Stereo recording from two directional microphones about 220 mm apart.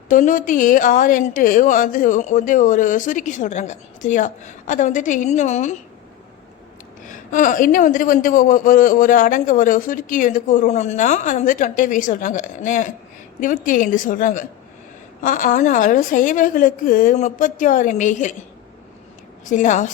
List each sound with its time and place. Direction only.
0.1 s a man's voice: 35° left (ahead or behind)
7.1 s a man's voice: 35° left (ahead or behind)
19.5 s a man's voice: 35° left (ahead or behind)